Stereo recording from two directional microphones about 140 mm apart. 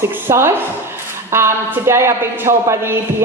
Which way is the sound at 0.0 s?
20° right (ahead or behind).